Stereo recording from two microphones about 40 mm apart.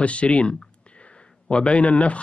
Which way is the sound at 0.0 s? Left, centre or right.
Left.